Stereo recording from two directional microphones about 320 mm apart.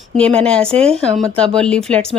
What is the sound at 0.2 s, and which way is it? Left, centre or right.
Speech, centre.